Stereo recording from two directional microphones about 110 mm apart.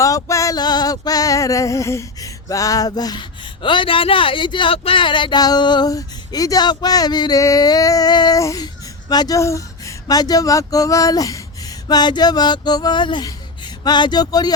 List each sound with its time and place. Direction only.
0.0 s male singing: 30° left (ahead or behind)